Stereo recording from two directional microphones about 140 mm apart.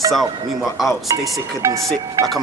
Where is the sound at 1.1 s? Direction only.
25° right (ahead or behind).